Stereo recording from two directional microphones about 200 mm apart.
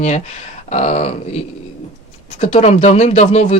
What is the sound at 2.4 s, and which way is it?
Speech, 35° left (ahead or behind).